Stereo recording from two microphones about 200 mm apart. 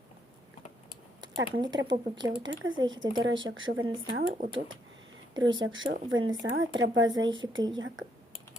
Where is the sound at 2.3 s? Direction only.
70° right (ahead or behind).